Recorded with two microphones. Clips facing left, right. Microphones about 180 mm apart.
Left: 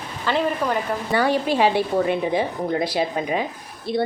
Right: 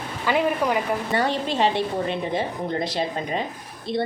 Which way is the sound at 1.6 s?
5° left (ahead or behind).